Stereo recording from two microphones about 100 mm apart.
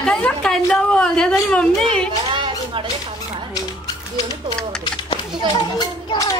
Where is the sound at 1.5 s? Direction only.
10° left (ahead or behind).